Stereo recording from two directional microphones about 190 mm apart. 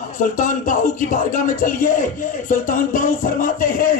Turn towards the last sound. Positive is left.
turn(degrees=50)  # may be behind; listen again after turning